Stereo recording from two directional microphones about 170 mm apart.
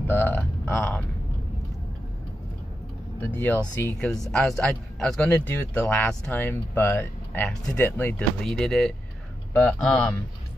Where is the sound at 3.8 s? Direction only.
5° left (ahead or behind).